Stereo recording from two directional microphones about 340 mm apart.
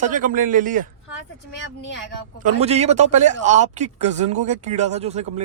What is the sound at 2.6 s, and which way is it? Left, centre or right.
Speech, centre.